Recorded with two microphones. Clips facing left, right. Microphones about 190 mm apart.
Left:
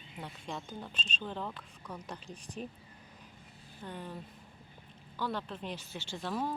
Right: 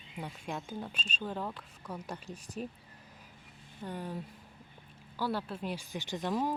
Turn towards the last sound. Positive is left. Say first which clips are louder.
# right 3 dB
turn(degrees=-15)  # may be behind; listen again after turning